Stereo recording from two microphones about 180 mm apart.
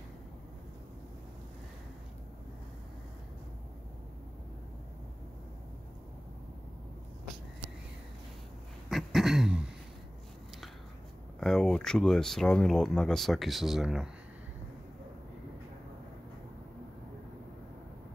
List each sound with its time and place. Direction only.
8.8 s throat clearing: centre (ahead or behind)
11.3 s speech: centre (ahead or behind)